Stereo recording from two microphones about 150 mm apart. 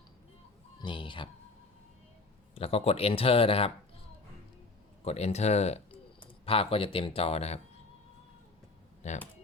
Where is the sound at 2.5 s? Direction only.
40° left (ahead or behind).